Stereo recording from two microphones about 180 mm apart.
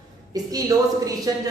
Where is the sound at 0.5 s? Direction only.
20° right (ahead or behind).